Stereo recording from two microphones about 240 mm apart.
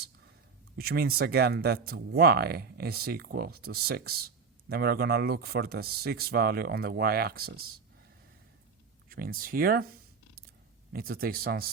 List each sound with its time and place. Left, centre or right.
0.8 s speech: right
9.0 s speech: right
10.9 s speech: right